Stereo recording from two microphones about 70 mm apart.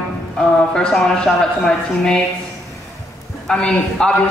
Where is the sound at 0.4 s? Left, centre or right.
Centre.